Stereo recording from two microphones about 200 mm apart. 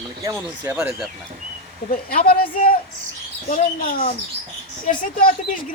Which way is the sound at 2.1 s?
45° left (ahead or behind).